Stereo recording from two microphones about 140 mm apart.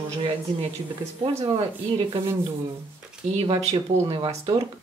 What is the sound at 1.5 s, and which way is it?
Speech, 40° right (ahead or behind).